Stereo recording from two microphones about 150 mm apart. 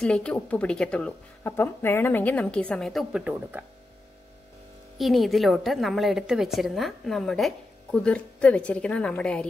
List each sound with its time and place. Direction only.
0.0 s a woman's voice: 5° left (ahead or behind)
4.9 s a woman's voice: centre (ahead or behind)